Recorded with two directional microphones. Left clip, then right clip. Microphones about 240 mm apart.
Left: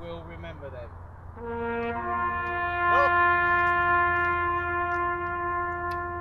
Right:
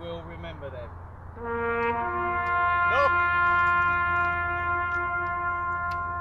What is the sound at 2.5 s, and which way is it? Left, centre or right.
Speech, right.